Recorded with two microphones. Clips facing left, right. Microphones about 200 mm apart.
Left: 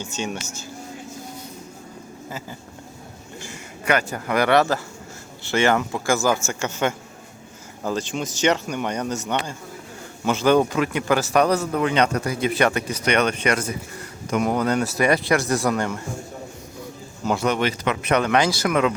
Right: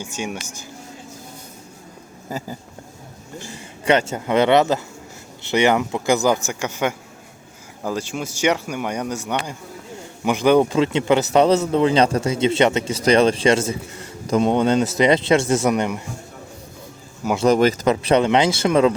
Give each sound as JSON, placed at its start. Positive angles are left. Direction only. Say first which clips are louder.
{"t": 0.0, "sound": "speech", "louder": "even", "side_deg": -10}
{"t": 2.3, "sound": "speech", "louder": "right 6 dB", "side_deg": -40}
{"t": 3.8, "sound": "speech", "louder": "right 4 dB", "side_deg": -25}
{"t": 17.3, "sound": "speech", "louder": "right 7 dB", "side_deg": -35}